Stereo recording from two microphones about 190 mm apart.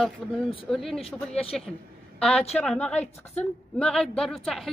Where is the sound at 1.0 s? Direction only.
30° left (ahead or behind).